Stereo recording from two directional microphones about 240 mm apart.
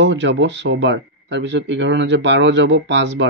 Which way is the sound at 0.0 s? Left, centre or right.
Right.